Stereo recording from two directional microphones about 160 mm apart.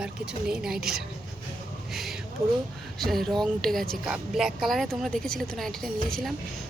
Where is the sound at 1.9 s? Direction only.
Centre (ahead or behind).